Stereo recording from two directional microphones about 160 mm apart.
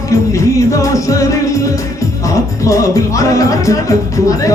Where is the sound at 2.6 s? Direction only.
20° left (ahead or behind).